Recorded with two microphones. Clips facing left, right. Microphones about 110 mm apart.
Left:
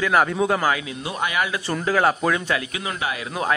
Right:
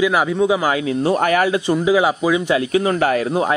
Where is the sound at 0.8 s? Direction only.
35° right (ahead or behind).